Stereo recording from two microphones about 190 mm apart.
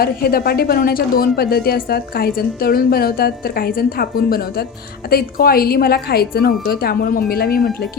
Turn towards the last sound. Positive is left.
turn(degrees=55)  # may be behind; listen again after turning